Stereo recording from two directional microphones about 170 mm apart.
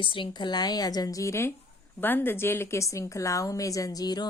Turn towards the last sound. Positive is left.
turn(degrees=25)  # may be behind; listen again after turning